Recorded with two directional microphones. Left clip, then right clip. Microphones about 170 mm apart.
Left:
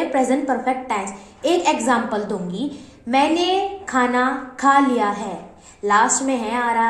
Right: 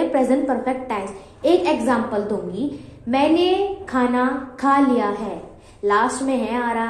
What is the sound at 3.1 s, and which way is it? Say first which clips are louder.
A woman's voice: even; 15° right (ahead or behind).